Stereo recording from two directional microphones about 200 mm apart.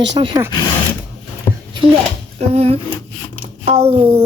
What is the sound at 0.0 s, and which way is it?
Speech, 25° right (ahead or behind).